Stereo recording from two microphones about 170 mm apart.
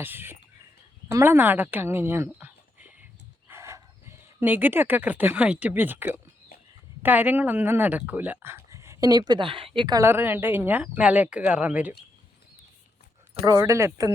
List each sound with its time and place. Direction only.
0.0 s a woman's voice: 10° right (ahead or behind)
13.4 s speech: 20° right (ahead or behind)